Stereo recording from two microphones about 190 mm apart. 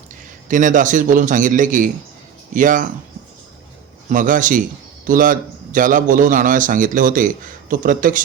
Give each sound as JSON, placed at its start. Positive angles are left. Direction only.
{"t": 0.4, "sound": "a man's voice", "side_deg": -45}
{"t": 4.1, "sound": "a man's voice", "side_deg": -45}